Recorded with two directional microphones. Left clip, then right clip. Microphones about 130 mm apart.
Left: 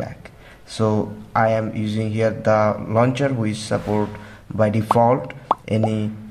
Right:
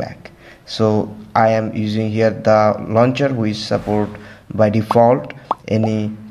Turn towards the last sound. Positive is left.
turn(degrees=-15)  # may be behind; listen again after turning